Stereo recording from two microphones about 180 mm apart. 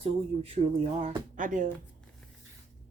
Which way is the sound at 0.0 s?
30° right (ahead or behind).